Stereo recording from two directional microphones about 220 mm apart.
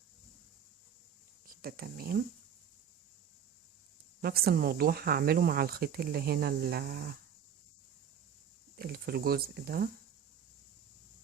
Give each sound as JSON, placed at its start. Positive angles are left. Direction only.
{"t": 1.5, "sound": "speech", "side_deg": -45}
{"t": 4.2, "sound": "speech", "side_deg": -45}
{"t": 8.7, "sound": "speech", "side_deg": -45}